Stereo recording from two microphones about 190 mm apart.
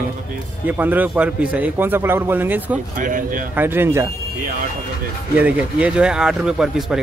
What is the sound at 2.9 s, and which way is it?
Speech, 45° right (ahead or behind).